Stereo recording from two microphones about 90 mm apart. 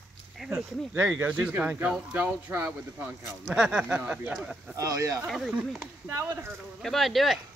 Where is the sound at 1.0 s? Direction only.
20° right (ahead or behind).